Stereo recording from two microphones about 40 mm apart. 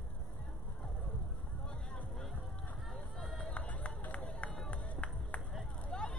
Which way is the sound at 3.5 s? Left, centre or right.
Left.